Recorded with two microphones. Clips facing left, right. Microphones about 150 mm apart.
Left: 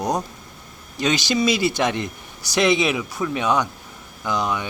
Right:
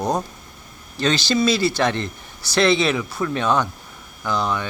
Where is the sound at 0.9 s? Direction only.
15° left (ahead or behind).